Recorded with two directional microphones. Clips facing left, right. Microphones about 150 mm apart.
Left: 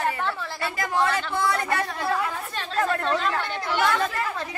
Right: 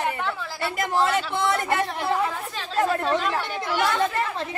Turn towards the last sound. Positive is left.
turn(degrees=-20)  # may be behind; listen again after turning